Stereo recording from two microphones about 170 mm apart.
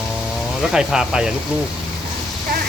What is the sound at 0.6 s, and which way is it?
Speech, 5° right (ahead or behind).